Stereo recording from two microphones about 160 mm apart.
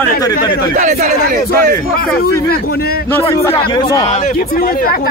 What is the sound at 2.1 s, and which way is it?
Speech, 70° left (ahead or behind).